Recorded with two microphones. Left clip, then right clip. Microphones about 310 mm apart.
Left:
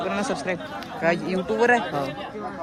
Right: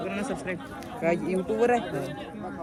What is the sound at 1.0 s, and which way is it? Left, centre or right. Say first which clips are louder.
Speech: left 3 dB; left.